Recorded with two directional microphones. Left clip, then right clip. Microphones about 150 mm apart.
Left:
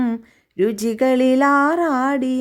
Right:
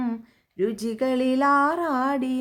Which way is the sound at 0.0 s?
45° left (ahead or behind).